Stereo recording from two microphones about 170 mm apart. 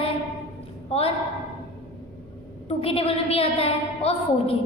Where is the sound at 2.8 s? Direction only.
35° left (ahead or behind).